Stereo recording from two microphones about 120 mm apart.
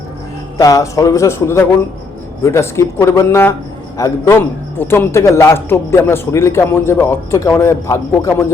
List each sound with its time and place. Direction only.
0.5 s a man's voice: 30° left (ahead or behind)